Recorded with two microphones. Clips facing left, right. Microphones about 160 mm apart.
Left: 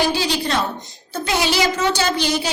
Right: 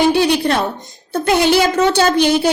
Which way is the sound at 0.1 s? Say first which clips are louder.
Right 7 dB; 60° right (ahead or behind).